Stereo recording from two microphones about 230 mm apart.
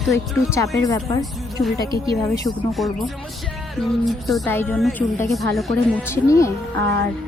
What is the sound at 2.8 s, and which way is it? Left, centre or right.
Speech, centre.